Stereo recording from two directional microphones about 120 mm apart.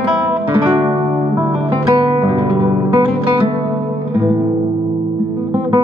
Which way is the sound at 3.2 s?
40° right (ahead or behind).